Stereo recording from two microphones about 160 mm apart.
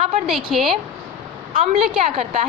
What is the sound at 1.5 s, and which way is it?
Speech, 40° right (ahead or behind).